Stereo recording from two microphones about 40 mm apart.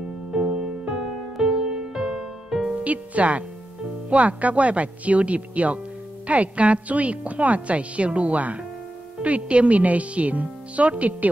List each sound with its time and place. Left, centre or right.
0.3 s music: centre
2.8 s a woman's voice: right